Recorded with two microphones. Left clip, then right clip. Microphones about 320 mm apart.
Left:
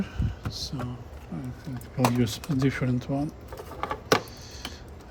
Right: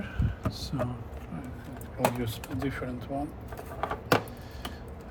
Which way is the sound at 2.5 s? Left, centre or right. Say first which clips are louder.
Left 7 dB; left.